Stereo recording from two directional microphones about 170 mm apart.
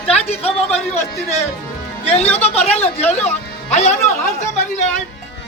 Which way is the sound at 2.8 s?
40° left (ahead or behind).